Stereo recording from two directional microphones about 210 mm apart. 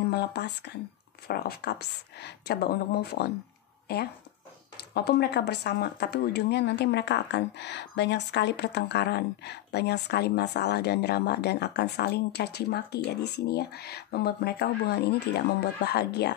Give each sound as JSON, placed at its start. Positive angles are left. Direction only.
{"t": 0.1, "sound": "speech", "side_deg": 50}
{"t": 4.7, "sound": "speech", "side_deg": 50}